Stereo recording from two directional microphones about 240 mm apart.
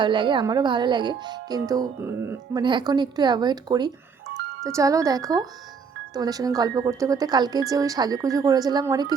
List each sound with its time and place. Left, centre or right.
0.0 s speech: centre